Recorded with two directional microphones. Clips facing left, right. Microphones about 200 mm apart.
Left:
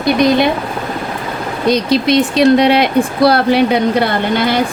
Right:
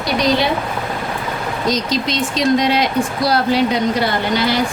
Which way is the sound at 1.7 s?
60° left (ahead or behind).